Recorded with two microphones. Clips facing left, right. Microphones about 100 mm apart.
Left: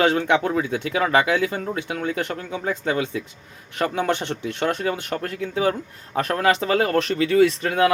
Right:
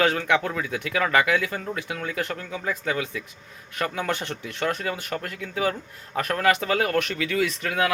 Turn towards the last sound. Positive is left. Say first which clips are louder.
# left 6 dB
turn(degrees=30)  # may be behind; listen again after turning